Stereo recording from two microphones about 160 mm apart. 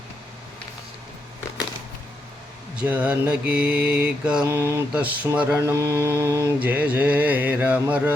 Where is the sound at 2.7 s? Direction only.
10° right (ahead or behind).